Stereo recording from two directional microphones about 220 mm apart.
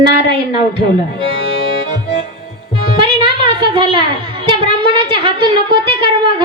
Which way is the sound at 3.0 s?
20° right (ahead or behind).